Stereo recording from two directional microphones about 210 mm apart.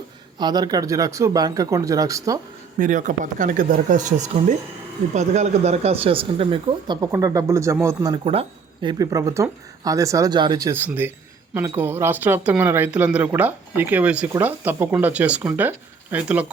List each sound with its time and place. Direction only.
0.3 s speech: 20° right (ahead or behind)
2.7 s speech: 40° right (ahead or behind); by 16.5 s 5° right (ahead or behind)